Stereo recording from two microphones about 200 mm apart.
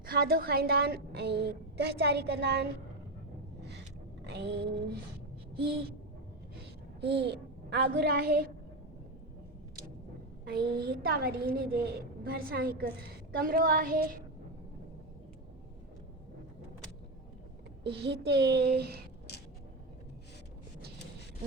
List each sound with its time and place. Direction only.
0.0 s a woman's voice: 50° right (ahead or behind)
4.2 s a sound: 55° right (ahead or behind)
7.0 s a child's voice: 55° right (ahead or behind)
10.5 s a child's voice: 50° right (ahead or behind)
17.8 s a woman's voice: 55° right (ahead or behind)